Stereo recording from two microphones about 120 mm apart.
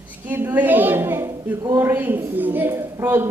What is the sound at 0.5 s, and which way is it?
A woman's voice, 15° right (ahead or behind).